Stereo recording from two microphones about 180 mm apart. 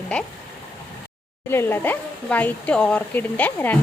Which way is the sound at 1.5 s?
15° left (ahead or behind).